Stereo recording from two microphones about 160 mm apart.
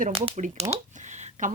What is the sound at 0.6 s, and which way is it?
Speech, 20° right (ahead or behind).